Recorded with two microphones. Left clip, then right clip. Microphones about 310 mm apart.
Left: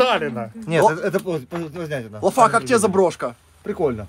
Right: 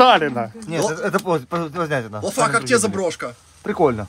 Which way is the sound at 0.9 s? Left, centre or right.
Centre.